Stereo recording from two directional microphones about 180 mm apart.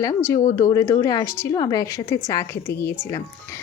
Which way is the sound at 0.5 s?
15° left (ahead or behind).